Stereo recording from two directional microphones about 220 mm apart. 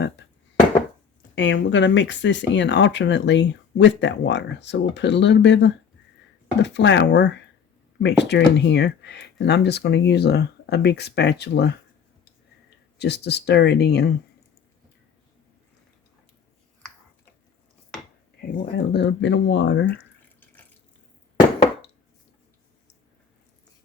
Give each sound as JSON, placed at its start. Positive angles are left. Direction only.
{"t": 1.4, "sound": "speech", "side_deg": 55}
{"t": 13.0, "sound": "speech", "side_deg": 50}
{"t": 18.3, "sound": "speech", "side_deg": 50}